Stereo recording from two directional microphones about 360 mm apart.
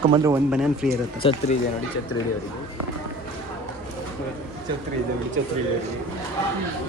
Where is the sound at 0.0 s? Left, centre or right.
Centre.